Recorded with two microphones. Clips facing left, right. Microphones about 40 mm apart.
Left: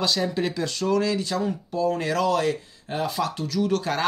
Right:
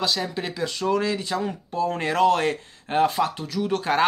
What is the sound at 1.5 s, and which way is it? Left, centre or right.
Speech, right.